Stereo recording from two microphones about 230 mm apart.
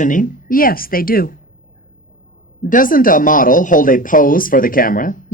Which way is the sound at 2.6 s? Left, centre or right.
Left.